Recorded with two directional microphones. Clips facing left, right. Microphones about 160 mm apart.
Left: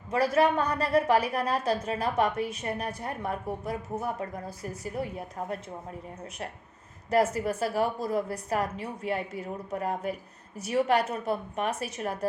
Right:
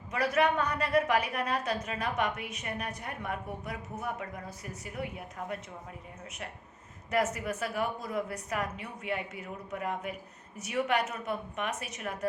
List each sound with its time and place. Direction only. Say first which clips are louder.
0.1 s a woman's voice: left 4 dB; 30° left (ahead or behind)
7.3 s a woman's voice: left 6 dB; 35° left (ahead or behind)